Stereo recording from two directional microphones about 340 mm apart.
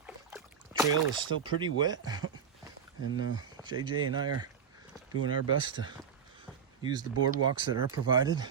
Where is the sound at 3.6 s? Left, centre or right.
Centre.